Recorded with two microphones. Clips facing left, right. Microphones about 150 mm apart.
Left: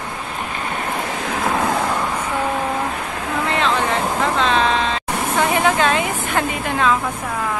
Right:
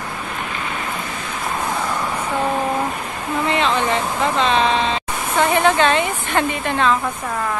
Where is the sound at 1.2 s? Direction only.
85° left.